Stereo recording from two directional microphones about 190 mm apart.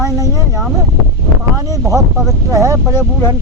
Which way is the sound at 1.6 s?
20° right (ahead or behind).